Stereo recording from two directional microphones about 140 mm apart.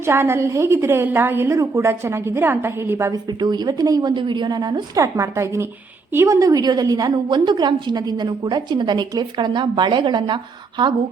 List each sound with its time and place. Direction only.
0.0 s a woman's voice: 15° right (ahead or behind)
3.2 s a woman's voice: 30° right (ahead or behind)